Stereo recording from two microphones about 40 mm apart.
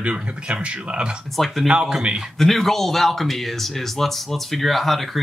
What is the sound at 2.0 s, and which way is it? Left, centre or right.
Speech, right.